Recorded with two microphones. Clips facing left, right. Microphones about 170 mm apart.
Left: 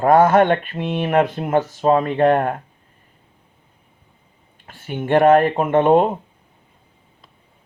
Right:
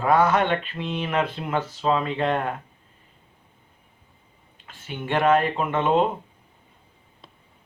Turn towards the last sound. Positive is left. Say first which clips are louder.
# left 7 dB
turn(degrees=50)  # may be behind; listen again after turning